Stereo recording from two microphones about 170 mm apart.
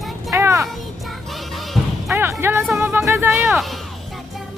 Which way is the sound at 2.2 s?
15° right (ahead or behind).